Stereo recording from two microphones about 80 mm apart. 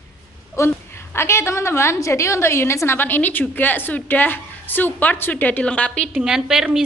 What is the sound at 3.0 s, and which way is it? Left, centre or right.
A woman's voice, left.